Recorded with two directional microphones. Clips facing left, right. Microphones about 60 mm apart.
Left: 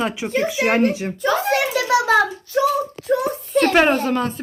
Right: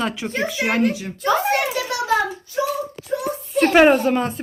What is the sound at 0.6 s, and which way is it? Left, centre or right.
Speech, left.